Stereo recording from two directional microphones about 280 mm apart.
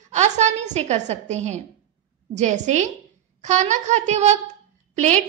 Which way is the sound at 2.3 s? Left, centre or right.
Right.